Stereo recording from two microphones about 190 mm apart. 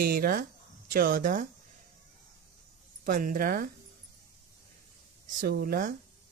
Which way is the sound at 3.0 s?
45° right (ahead or behind).